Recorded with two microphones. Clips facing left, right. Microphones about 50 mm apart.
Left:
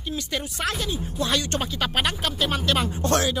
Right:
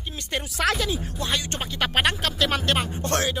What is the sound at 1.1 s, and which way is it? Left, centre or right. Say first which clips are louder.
Speech: left 3 dB; right.